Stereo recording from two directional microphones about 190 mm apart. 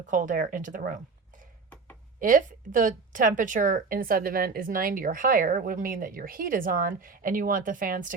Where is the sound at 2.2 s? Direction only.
45° right (ahead or behind).